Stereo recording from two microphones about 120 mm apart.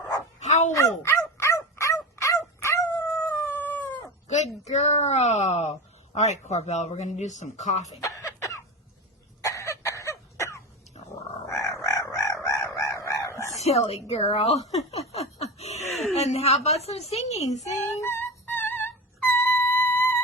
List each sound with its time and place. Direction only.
0.3 s dog: 70° left (ahead or behind)
0.7 s dog: 25° left (ahead or behind)
3.2 s howl: 15° left (ahead or behind)
4.3 s a sound: 70° left (ahead or behind)
6.1 s speech: 75° left (ahead or behind)
8.0 s cough: 25° left (ahead or behind)
11.4 s chicken: 25° left (ahead or behind)
13.0 s crowing: 25° left (ahead or behind)
13.6 s a woman's voice: 65° left (ahead or behind)
15.1 s snicker: 60° left (ahead or behind)
15.9 s a sound: centre (ahead or behind)
16.1 s a woman's voice: 65° left (ahead or behind)
18.0 s music: 20° left (ahead or behind)